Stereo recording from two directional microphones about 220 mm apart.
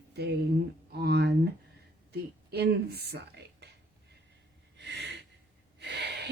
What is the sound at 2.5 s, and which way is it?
A woman's voice, 45° right (ahead or behind).